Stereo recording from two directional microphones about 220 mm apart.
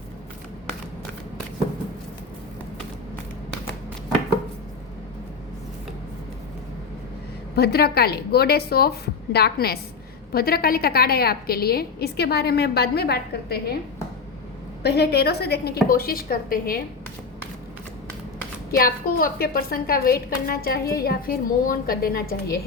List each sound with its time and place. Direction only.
7.5 s a woman's voice: 45° left (ahead or behind)
14.8 s a woman's voice: 50° left (ahead or behind)
18.8 s a woman's voice: 40° left (ahead or behind)